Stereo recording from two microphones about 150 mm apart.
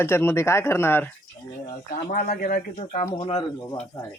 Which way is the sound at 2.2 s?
75° left (ahead or behind).